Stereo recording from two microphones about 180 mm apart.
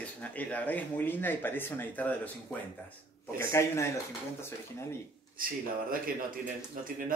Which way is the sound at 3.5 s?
15° left (ahead or behind).